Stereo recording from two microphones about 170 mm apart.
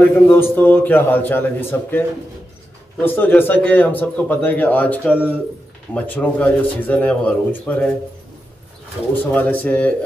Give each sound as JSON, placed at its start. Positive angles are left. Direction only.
{"t": 0.0, "sound": "a man's voice", "side_deg": 10}
{"t": 9.1, "sound": "a man's voice", "side_deg": 10}